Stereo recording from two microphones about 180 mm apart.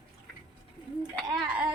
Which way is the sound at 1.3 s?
5° right (ahead or behind).